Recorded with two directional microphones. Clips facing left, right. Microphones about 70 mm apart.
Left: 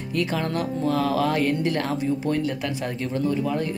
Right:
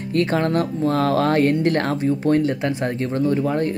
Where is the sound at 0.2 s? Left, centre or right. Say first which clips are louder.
Right 6 dB; right.